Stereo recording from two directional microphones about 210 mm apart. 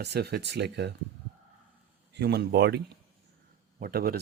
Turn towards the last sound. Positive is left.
turn(degrees=-45)  # may be behind; listen again after turning